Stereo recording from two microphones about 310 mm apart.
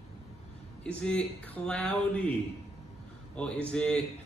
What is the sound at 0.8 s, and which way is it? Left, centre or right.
Speech, centre.